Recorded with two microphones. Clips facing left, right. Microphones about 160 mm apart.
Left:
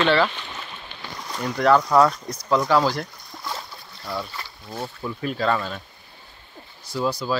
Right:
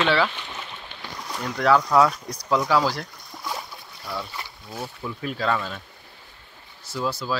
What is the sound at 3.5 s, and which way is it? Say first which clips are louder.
Boat: right 1 dB; 15° right (ahead or behind).